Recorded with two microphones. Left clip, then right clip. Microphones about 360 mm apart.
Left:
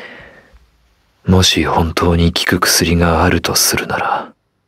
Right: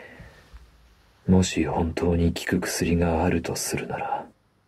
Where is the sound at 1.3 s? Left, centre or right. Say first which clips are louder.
Left 11 dB; left.